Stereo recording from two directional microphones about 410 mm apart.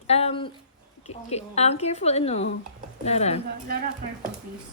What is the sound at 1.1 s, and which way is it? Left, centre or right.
A woman's voice, centre.